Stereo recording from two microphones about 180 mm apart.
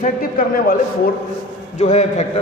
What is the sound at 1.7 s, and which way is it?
Speech, 40° left (ahead or behind).